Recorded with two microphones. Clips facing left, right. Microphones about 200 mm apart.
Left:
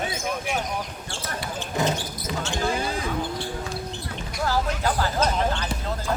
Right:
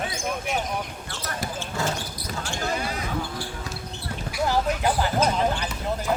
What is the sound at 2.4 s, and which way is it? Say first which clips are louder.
Basketball bounce: left 2 dB; 25° left (ahead or behind).